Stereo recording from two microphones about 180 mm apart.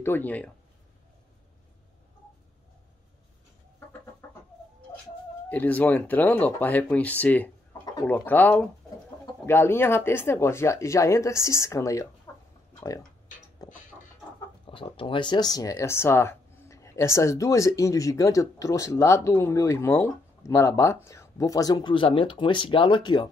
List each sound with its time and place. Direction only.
0.0 s speech: 10° left (ahead or behind)
5.5 s speech: 10° left (ahead or behind)
7.8 s a sound: 20° left (ahead or behind)
8.1 s speech: 10° left (ahead or behind)
13.6 s a sound: 20° left (ahead or behind)
14.7 s speech: 30° left (ahead or behind)